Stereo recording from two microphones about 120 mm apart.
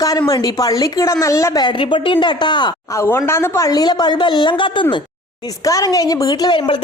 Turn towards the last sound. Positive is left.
turn(degrees=40)  # may be behind; listen again after turning